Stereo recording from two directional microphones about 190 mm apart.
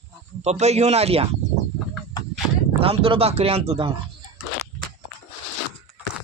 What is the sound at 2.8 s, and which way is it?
Speech, 30° right (ahead or behind).